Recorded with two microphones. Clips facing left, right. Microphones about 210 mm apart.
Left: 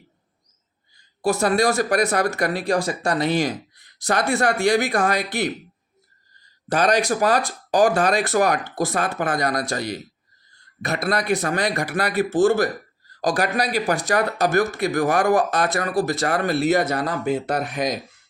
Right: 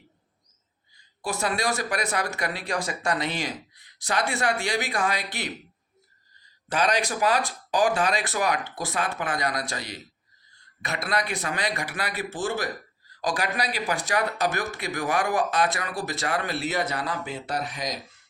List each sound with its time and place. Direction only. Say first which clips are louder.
1.2 s speech: left 9 dB; 40° left (ahead or behind)
6.7 s speech: left 6 dB; 45° left (ahead or behind)